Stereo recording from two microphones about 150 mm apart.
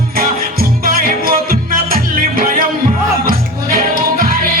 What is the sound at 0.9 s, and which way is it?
Music, 75° right (ahead or behind).